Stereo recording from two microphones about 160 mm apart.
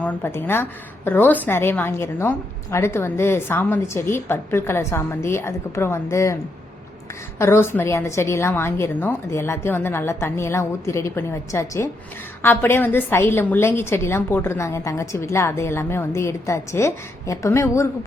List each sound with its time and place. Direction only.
0.0 s a woman's voice: 10° left (ahead or behind)
7.3 s a woman's voice: 15° left (ahead or behind)